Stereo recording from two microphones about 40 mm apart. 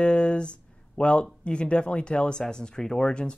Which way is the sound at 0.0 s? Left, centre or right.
Left.